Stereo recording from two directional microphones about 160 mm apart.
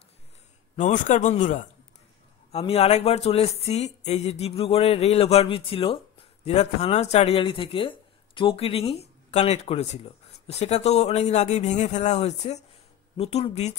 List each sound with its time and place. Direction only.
0.7 s speech: 50° left (ahead or behind)
2.5 s speech: 40° left (ahead or behind)